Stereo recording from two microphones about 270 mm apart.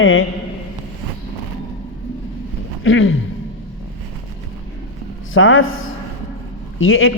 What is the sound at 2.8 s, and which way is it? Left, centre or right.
Speech, left.